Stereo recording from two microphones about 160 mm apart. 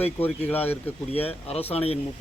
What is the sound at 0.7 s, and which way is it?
Speech, 40° left (ahead or behind).